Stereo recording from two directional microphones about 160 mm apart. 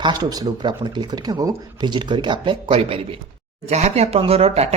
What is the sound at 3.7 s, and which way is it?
Speech, 45° right (ahead or behind).